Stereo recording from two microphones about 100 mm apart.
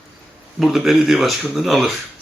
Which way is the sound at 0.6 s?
Centre (ahead or behind).